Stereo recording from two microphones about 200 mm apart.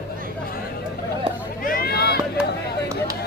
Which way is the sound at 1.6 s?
45° left (ahead or behind).